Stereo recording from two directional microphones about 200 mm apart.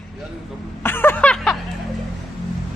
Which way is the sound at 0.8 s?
10° left (ahead or behind).